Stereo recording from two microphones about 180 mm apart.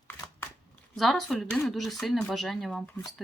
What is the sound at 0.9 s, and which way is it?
Speech, centre (ahead or behind).